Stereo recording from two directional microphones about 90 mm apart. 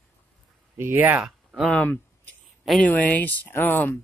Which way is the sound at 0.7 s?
25° right (ahead or behind).